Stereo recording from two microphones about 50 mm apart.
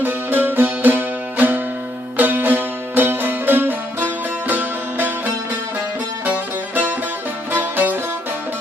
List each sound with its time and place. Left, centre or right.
0.0 s music: right
7.5 s music: right